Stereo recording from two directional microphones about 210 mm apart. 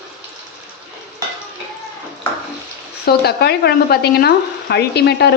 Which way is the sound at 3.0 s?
50° left (ahead or behind).